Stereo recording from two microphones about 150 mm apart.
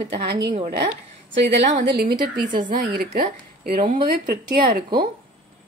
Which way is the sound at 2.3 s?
65° right (ahead or behind).